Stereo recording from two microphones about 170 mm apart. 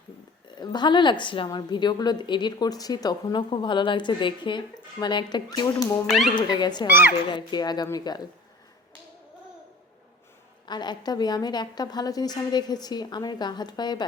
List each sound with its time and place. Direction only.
0.5 s a woman's voice: 25° left (ahead or behind)
6.1 s speech: centre (ahead or behind)
6.3 s a woman's voice: 25° left (ahead or behind)
10.7 s a woman's voice: 25° left (ahead or behind)